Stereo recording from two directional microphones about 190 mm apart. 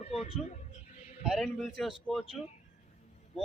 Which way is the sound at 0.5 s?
35° left (ahead or behind).